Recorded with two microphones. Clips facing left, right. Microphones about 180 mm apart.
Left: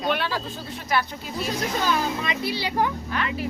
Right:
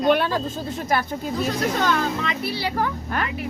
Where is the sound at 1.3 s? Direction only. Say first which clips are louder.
Right 3 dB; 10° left (ahead or behind).